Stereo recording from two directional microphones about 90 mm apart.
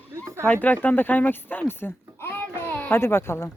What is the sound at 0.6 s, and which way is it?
Speech, 20° left (ahead or behind).